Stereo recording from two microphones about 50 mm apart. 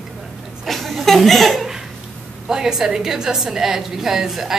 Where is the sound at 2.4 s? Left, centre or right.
Centre.